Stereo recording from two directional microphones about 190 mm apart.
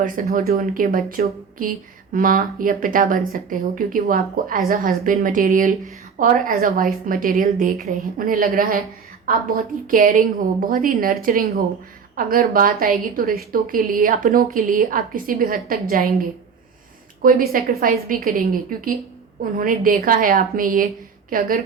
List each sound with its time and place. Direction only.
0.0 s speech: 45° right (ahead or behind)
9.9 s speech: 45° right (ahead or behind)
17.2 s speech: 50° right (ahead or behind)